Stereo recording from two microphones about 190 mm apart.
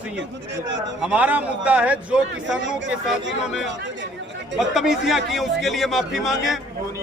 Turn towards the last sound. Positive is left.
turn(degrees=0)  # may be behind; listen again after turning